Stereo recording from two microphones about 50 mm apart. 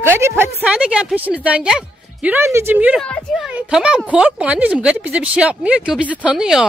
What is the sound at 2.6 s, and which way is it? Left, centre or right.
Speech, right.